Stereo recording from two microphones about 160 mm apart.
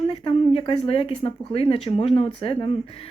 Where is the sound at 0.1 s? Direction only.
35° left (ahead or behind).